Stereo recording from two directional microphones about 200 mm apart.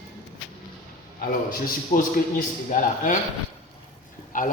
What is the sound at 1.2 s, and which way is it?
A man's voice, 45° left (ahead or behind).